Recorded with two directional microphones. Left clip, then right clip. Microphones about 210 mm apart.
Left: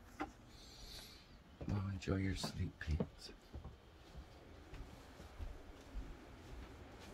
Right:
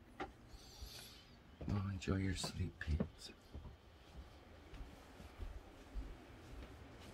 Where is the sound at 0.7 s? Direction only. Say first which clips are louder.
Left 1 dB; 10° right (ahead or behind).